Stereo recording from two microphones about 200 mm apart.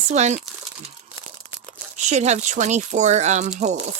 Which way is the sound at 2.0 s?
35° right (ahead or behind).